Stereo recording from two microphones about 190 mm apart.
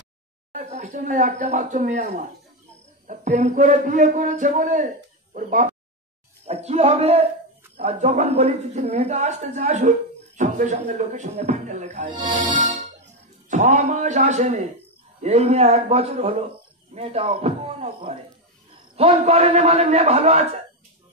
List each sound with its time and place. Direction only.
0.5 s a man's voice: 40° right (ahead or behind)
12.2 s speech: 25° right (ahead or behind)
12.5 s music: 35° right (ahead or behind)
13.5 s a man's voice: 35° right (ahead or behind)